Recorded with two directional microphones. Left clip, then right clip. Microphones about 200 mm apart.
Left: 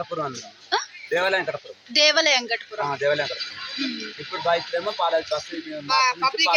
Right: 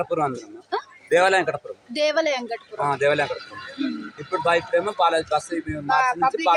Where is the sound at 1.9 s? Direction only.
5° right (ahead or behind).